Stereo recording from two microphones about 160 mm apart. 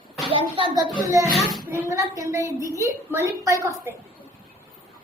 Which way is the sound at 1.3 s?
Centre (ahead or behind).